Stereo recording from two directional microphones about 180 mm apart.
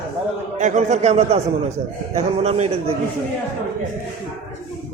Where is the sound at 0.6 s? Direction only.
40° right (ahead or behind).